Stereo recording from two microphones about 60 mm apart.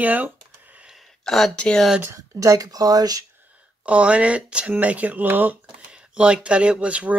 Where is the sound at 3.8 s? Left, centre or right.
Right.